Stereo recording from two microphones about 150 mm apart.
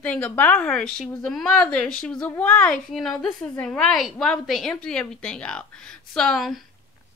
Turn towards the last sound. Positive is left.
turn(degrees=0)  # may be behind; listen again after turning